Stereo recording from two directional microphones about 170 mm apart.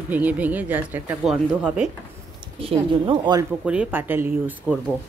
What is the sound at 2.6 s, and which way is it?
Speech, 30° right (ahead or behind).